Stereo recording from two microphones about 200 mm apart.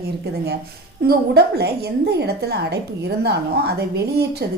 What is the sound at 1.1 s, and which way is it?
A woman's voice, 55° right (ahead or behind).